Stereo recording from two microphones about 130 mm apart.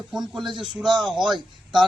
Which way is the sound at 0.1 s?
Centre (ahead or behind).